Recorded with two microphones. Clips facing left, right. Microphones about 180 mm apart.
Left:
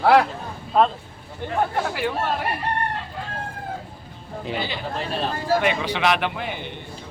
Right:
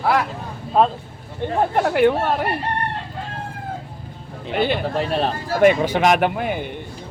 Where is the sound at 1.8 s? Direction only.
60° right (ahead or behind).